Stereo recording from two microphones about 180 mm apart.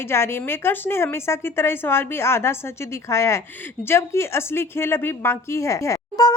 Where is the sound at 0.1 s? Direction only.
15° left (ahead or behind).